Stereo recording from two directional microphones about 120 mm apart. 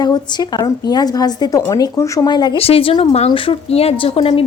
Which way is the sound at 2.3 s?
35° left (ahead or behind).